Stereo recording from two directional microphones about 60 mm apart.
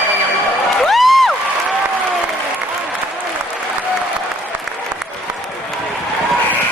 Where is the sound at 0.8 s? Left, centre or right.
Centre.